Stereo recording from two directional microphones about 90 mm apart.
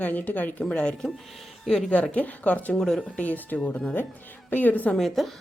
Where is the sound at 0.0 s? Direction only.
15° left (ahead or behind); by 1.9 s centre (ahead or behind).